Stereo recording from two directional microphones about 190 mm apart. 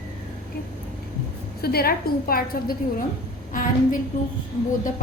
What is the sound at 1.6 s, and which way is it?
A woman's voice, 55° left (ahead or behind).